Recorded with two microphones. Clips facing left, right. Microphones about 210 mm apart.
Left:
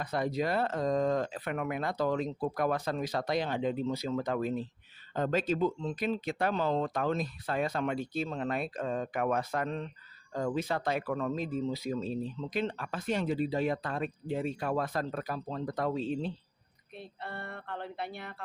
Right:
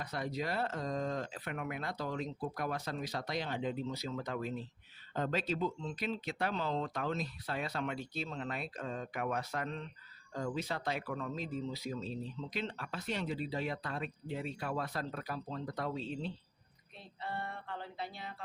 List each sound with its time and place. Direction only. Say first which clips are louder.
0.0 s speech: left 7 dB; 55° left (ahead or behind); by 2.8 s 75° left (ahead or behind)
2.8 s speech: left 7 dB; 55° left (ahead or behind)
17.0 s speech: even; 60° left (ahead or behind)